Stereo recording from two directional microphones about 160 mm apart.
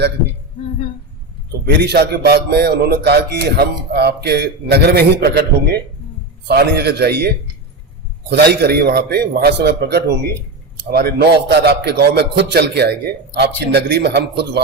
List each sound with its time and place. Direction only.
1.6 s a man's voice: 90° right